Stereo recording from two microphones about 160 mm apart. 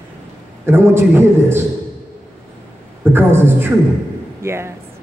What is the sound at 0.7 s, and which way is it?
Speech, 15° right (ahead or behind).